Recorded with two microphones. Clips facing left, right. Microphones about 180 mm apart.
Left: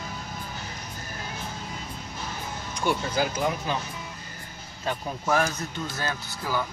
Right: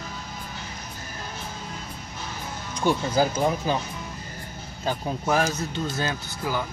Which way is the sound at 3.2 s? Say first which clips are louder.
Right 4 dB; 35° right (ahead or behind).